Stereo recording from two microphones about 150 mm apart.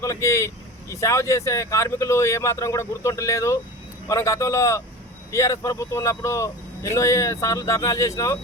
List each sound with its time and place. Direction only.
0.0 s speech: 20° left (ahead or behind)